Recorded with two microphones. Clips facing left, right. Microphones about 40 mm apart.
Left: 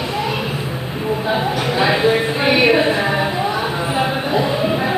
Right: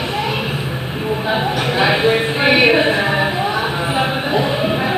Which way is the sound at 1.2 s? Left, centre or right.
Right.